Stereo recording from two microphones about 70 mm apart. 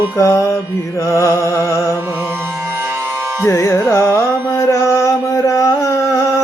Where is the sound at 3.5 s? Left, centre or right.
Left.